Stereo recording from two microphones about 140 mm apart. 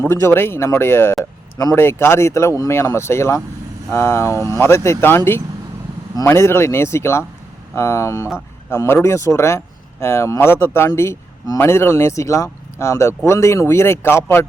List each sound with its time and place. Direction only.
0.0 s speech: 15° left (ahead or behind)